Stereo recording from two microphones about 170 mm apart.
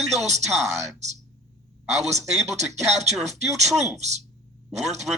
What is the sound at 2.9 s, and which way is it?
Speech, 40° right (ahead or behind).